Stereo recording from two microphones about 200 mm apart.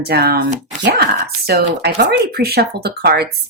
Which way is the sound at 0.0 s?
55° right (ahead or behind).